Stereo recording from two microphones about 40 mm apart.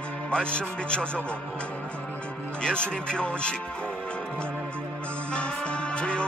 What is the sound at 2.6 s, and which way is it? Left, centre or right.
Speech, left.